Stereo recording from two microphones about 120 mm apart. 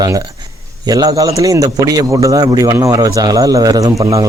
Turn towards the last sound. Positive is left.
turn(degrees=-30)  # may be behind; listen again after turning